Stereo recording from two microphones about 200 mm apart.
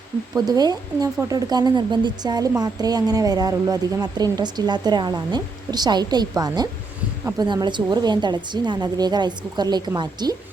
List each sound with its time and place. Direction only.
0.3 s speech: 20° right (ahead or behind)